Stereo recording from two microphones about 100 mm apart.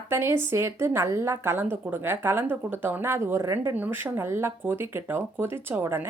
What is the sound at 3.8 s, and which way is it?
Speech, 20° right (ahead or behind).